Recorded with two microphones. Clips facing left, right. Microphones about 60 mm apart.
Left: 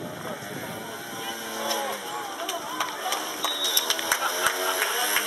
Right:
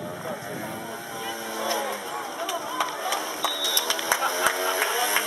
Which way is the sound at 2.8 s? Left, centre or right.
Centre.